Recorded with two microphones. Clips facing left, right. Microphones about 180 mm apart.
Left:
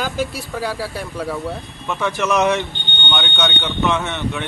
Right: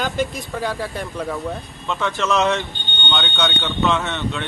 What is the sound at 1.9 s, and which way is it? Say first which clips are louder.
Speech: left 1 dB; 15° left (ahead or behind).